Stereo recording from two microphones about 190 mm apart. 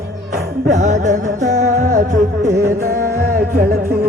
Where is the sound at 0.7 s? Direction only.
40° right (ahead or behind).